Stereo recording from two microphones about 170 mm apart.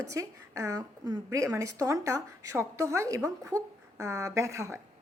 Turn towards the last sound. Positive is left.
turn(degrees=-15)  # may be behind; listen again after turning